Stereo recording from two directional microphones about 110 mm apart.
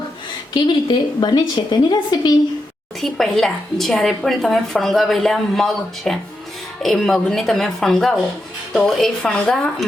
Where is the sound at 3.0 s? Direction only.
Centre (ahead or behind).